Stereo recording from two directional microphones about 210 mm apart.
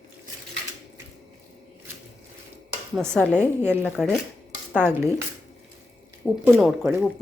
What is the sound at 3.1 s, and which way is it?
Speech, 5° left (ahead or behind).